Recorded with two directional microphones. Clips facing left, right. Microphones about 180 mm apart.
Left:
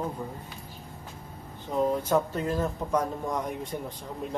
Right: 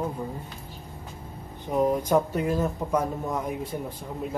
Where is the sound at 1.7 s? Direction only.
15° right (ahead or behind).